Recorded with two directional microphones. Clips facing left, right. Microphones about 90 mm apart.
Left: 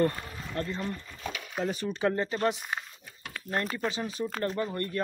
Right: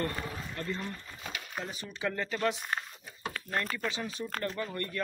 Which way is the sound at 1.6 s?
55° left (ahead or behind).